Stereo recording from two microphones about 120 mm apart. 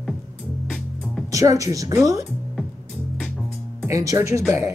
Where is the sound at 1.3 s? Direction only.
30° right (ahead or behind).